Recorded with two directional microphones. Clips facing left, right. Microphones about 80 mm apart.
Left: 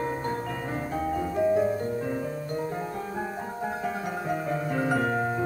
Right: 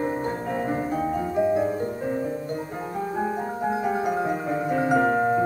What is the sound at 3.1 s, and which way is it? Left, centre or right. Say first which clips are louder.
Music: right 6 dB; centre.